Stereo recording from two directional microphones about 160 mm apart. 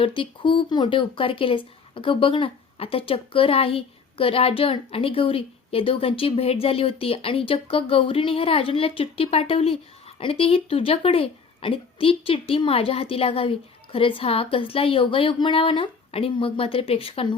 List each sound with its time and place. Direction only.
0.0 s speech: 30° left (ahead or behind)